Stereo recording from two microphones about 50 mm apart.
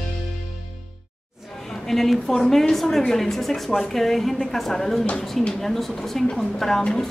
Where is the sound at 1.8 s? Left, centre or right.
Centre.